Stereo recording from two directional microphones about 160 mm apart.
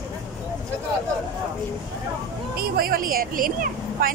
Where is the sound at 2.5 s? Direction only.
70° right (ahead or behind).